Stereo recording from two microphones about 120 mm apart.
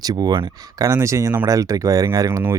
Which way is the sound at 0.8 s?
25° right (ahead or behind).